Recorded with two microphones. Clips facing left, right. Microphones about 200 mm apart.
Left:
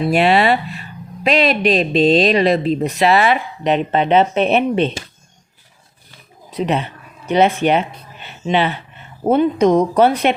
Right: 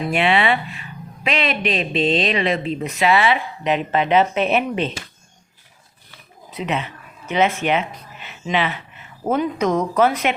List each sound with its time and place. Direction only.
0.0 s speech: 40° left (ahead or behind)
6.5 s speech: 35° left (ahead or behind)